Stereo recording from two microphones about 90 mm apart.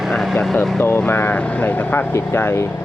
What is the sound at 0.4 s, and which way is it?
Speech, 5° left (ahead or behind).